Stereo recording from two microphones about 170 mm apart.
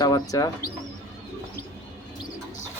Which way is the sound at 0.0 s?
20° left (ahead or behind).